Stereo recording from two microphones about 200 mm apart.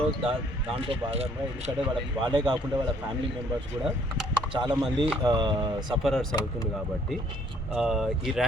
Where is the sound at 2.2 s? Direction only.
20° right (ahead or behind).